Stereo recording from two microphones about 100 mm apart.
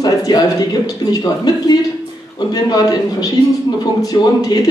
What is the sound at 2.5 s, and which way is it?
Speech, 40° left (ahead or behind).